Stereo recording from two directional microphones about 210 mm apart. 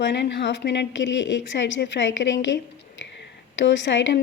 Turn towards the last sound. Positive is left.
turn(degrees=60)  # may be behind; listen again after turning